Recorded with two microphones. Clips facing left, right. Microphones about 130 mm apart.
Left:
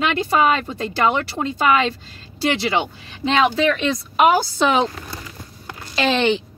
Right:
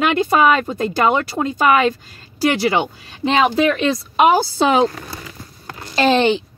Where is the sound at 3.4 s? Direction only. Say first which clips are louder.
Right 2 dB; 30° right (ahead or behind).